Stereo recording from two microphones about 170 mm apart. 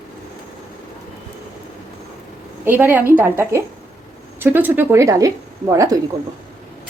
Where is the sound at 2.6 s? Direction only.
10° right (ahead or behind).